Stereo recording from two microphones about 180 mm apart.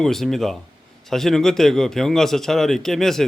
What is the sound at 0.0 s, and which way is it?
A man's voice, centre (ahead or behind).